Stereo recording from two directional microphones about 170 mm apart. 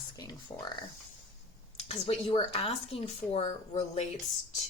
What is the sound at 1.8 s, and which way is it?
Speech, 35° left (ahead or behind).